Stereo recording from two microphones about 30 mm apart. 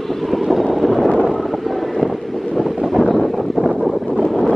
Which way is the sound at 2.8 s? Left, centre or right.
Centre.